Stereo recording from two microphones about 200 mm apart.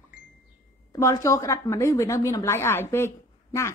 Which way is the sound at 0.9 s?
15° left (ahead or behind).